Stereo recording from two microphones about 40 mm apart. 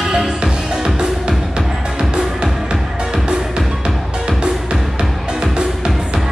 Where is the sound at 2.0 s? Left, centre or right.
Centre.